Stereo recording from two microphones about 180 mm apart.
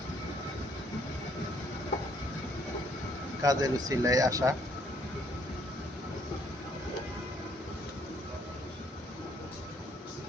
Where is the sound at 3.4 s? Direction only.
20° right (ahead or behind).